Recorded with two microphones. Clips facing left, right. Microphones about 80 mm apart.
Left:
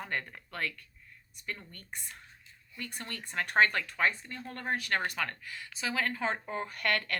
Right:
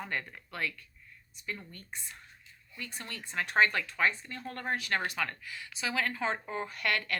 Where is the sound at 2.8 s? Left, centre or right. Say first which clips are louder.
Left 1 dB; left.